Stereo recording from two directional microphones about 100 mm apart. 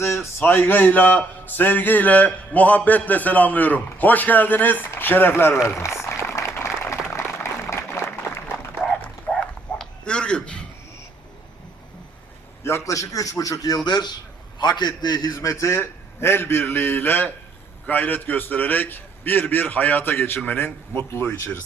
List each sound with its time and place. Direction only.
0.0 s a man's voice: 25° left (ahead or behind)
5.6 s a sound: 30° left (ahead or behind)
9.3 s bow-wow: 10° left (ahead or behind)
12.6 s a man's voice: 30° left (ahead or behind); by 15.2 s 50° left (ahead or behind)
15.4 s a man's voice: 30° left (ahead or behind)